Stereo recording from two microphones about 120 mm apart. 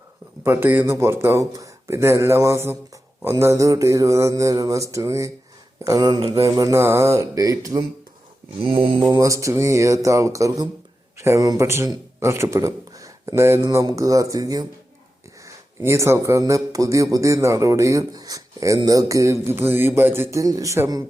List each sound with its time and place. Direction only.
0.4 s speech: 20° right (ahead or behind); by 6.3 s 40° right (ahead or behind)
6.3 s speech: 25° right (ahead or behind)
8.6 s speech: 45° right (ahead or behind)
9.0 s speech: 30° right (ahead or behind)